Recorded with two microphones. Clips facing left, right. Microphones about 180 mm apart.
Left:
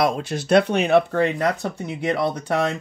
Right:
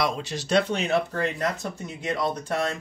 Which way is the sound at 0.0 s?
55° left (ahead or behind).